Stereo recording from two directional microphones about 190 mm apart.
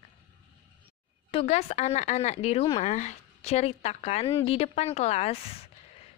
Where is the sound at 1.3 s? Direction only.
30° left (ahead or behind).